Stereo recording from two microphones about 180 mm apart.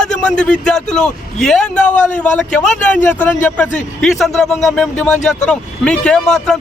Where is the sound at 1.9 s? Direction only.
45° left (ahead or behind).